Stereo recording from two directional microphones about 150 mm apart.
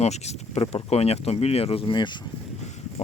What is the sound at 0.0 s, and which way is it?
Speech, 45° left (ahead or behind).